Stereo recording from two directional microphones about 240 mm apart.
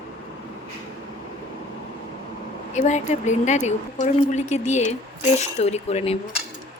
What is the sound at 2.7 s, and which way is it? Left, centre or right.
A woman's voice, left.